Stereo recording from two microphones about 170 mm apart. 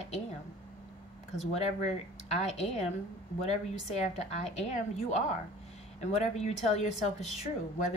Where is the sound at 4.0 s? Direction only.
40° left (ahead or behind).